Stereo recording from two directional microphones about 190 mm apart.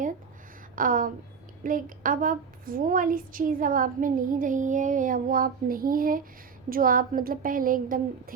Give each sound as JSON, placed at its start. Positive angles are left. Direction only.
{"t": 0.8, "sound": "a woman's voice", "side_deg": -45}